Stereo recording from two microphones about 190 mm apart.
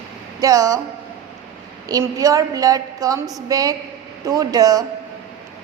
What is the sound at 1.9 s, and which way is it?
A woman's voice, 20° right (ahead or behind).